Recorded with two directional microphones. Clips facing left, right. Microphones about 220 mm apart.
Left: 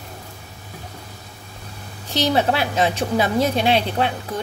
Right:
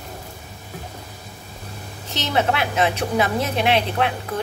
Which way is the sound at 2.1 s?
35° left (ahead or behind).